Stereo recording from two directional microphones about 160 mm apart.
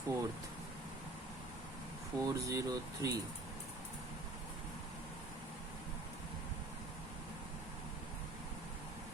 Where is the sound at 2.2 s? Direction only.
20° right (ahead or behind).